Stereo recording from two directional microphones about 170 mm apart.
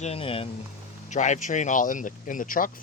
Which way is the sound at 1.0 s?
45° left (ahead or behind).